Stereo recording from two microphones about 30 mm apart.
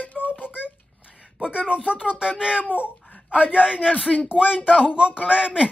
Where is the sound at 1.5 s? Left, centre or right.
Right.